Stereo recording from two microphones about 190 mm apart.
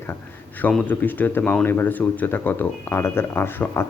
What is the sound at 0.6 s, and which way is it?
Speech, 5° left (ahead or behind).